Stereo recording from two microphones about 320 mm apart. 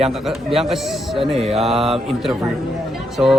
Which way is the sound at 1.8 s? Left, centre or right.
Centre.